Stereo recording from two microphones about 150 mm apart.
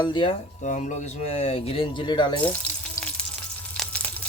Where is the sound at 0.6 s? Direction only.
55° left (ahead or behind); by 2.3 s 30° left (ahead or behind).